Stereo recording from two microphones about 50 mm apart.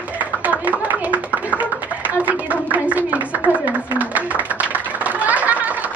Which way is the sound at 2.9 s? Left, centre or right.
Right.